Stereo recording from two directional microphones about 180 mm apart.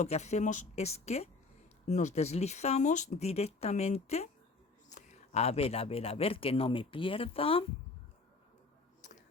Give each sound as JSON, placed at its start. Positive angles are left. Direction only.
{"t": 0.0, "sound": "speech", "side_deg": 40}